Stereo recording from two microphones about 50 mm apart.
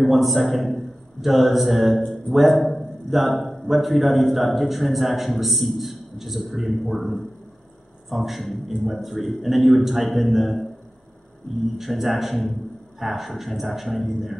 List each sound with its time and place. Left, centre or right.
0.0 s a man's voice: centre
7.0 s a man's voice: left
8.1 s a man's voice: centre
11.8 s a man's voice: centre